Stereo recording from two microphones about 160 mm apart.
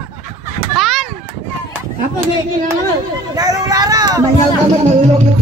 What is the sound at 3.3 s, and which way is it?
Speech, 25° right (ahead or behind).